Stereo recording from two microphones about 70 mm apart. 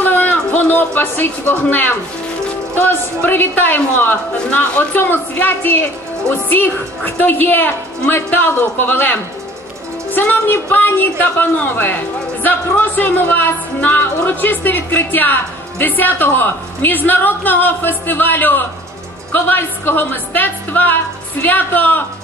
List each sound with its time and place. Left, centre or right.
0.0 s a sound: left
2.7 s speech: left
12.4 s speech: left